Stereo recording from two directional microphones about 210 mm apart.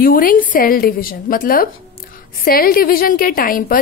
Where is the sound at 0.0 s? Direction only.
40° left (ahead or behind).